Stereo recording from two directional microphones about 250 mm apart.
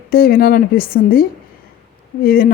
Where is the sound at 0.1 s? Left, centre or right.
Left.